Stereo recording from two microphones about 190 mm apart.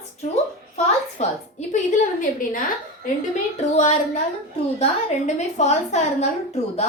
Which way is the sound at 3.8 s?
40° left (ahead or behind).